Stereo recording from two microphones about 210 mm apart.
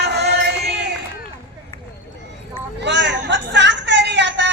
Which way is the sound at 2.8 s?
55° right (ahead or behind).